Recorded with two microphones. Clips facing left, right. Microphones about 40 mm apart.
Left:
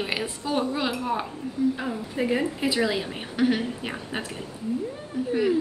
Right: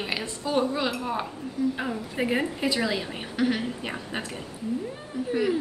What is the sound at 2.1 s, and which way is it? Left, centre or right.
Speech, centre.